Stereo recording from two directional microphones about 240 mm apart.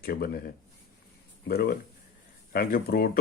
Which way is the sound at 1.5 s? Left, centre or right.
Left.